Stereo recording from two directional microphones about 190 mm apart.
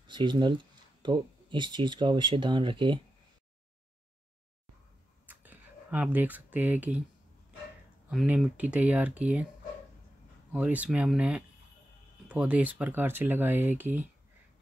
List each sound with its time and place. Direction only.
0.0 s speech: 25° right (ahead or behind)
5.2 s a sound: 10° right (ahead or behind)
8.1 s speech: centre (ahead or behind)
10.5 s speech: 5° right (ahead or behind)